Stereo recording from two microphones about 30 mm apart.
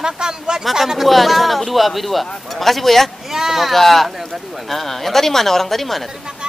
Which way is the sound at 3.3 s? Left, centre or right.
Centre.